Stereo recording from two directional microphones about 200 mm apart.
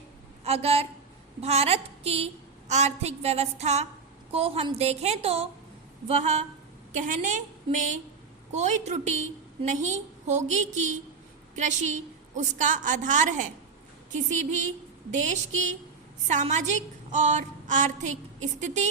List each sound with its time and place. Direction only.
0.4 s a woman's voice: 30° right (ahead or behind)
15.1 s a woman's voice: 35° right (ahead or behind)